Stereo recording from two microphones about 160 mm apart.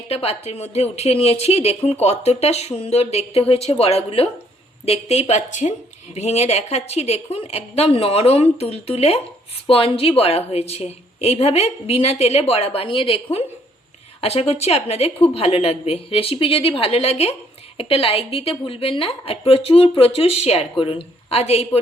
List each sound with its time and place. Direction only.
0.1 s a woman's voice: 40° left (ahead or behind)